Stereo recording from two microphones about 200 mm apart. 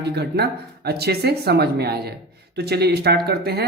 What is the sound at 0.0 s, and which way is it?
Speech, 55° right (ahead or behind).